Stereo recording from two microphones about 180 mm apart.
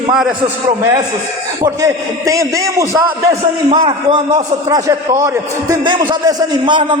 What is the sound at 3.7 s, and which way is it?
A man's voice, 25° right (ahead or behind).